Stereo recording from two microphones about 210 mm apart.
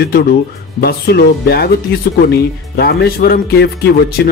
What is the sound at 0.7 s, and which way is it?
Speech, 50° left (ahead or behind).